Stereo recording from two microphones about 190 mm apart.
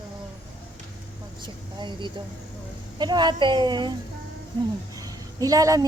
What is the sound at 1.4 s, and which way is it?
Speech, 25° right (ahead or behind).